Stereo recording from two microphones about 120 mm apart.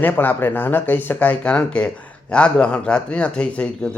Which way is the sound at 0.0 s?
15° left (ahead or behind).